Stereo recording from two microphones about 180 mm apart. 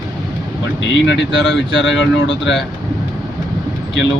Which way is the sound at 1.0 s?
80° left.